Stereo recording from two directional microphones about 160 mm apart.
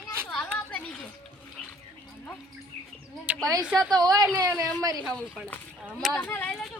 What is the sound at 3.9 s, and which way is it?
Speech, 25° right (ahead or behind).